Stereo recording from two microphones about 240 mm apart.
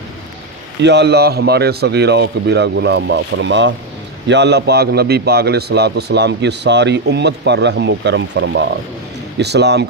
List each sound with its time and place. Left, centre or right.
0.8 s a man's voice: right